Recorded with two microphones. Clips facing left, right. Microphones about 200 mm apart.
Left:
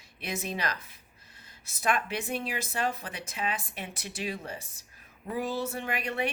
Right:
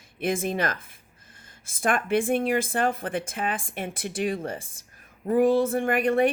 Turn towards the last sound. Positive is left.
turn(degrees=-50)  # may be behind; listen again after turning